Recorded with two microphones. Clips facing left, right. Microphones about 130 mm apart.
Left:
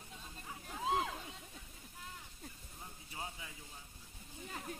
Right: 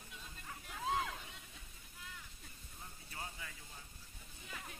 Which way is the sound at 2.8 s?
20° left (ahead or behind).